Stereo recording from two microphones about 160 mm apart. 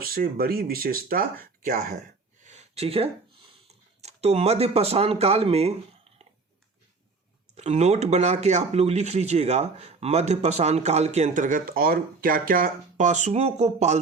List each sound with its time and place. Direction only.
0.0 s speech: 70° right (ahead or behind)
2.4 s a sound: 45° right (ahead or behind)
3.7 s speech: 40° right (ahead or behind)
7.5 s speech: 45° right (ahead or behind)